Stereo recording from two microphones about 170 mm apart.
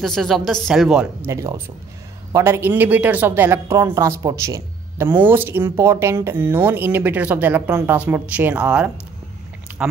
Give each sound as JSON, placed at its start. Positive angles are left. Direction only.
{"t": 0.0, "sound": "a woman's voice", "side_deg": 0}
{"t": 1.3, "sound": "speech", "side_deg": -20}
{"t": 9.7, "sound": "chewing", "side_deg": -10}